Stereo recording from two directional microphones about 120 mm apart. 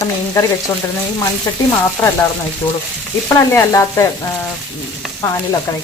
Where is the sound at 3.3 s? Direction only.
25° left (ahead or behind).